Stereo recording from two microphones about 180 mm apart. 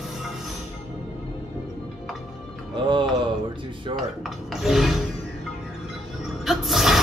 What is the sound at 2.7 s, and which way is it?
Music, 25° right (ahead or behind).